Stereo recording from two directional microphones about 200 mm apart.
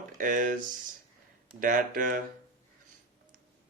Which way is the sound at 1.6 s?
45° right (ahead or behind).